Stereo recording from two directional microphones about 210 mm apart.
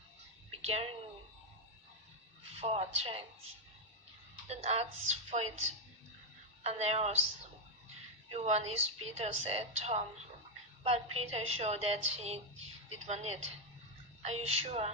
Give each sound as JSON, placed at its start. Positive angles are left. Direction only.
{"t": 0.6, "sound": "speech", "side_deg": -30}
{"t": 2.4, "sound": "speech", "side_deg": -30}
{"t": 4.4, "sound": "a woman's voice", "side_deg": -30}
{"t": 6.6, "sound": "a woman's voice", "side_deg": -30}
{"t": 8.3, "sound": "a woman's voice", "side_deg": -30}